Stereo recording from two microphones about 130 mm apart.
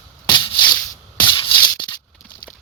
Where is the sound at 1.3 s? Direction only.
40° left (ahead or behind).